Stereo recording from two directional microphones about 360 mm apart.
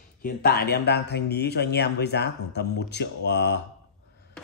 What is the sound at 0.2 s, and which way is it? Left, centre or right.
A man's voice, left.